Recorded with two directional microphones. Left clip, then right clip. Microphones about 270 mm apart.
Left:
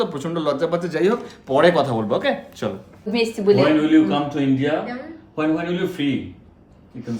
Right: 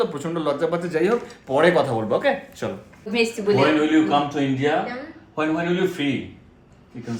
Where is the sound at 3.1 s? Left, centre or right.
Left.